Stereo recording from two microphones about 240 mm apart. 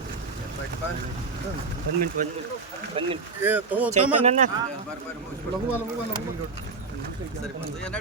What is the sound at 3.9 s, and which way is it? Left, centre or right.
Speech, right.